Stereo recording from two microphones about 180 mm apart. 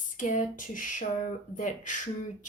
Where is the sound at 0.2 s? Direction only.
45° left (ahead or behind).